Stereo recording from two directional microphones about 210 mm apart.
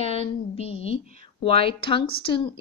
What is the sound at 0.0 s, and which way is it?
A woman's voice, 30° left (ahead or behind).